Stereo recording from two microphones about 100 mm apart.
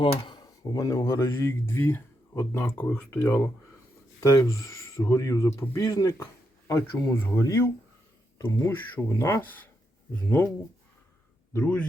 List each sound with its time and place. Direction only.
0.0 s speech: 45° left (ahead or behind); by 10.5 s 20° left (ahead or behind)
11.5 s speech: 15° left (ahead or behind)